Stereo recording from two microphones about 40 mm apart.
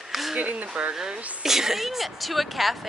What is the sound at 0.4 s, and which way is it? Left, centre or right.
Speech, right.